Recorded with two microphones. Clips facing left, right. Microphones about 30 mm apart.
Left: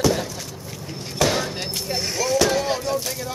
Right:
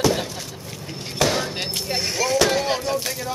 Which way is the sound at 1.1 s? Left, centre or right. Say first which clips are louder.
Even; centre.